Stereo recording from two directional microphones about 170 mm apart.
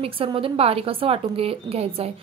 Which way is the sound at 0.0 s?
30° right (ahead or behind).